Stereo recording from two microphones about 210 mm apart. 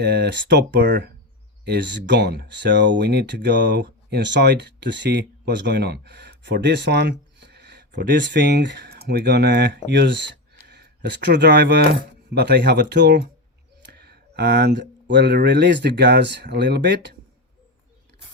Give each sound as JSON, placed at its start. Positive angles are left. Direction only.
{"t": 0.0, "sound": "speech", "side_deg": -50}